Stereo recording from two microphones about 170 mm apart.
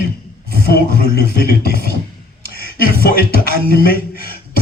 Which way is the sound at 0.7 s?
65° left (ahead or behind).